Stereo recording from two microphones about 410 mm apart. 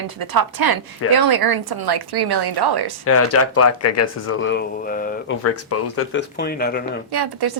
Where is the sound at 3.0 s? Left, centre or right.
Left.